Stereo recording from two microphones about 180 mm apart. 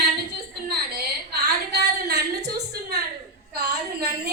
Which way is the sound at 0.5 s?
60° right (ahead or behind).